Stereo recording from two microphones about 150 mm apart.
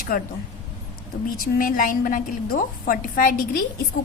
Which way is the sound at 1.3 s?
70° left (ahead or behind).